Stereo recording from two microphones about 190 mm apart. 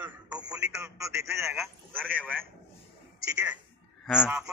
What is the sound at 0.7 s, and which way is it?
Speech, 15° right (ahead or behind).